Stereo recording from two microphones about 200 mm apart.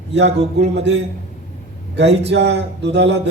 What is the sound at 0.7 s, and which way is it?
Speech, 60° right (ahead or behind).